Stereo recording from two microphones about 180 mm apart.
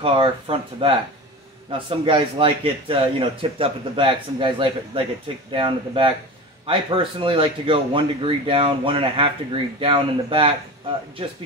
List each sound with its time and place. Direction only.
0.0 s speech: 30° right (ahead or behind)